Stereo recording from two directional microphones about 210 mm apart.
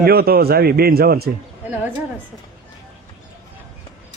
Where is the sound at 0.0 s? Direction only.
45° right (ahead or behind).